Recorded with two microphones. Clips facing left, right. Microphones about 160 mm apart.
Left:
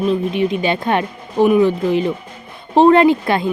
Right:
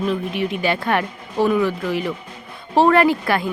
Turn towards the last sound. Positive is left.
turn(degrees=20)  # may be behind; listen again after turning